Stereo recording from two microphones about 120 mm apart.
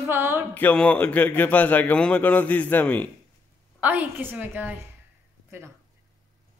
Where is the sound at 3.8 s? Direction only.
10° right (ahead or behind).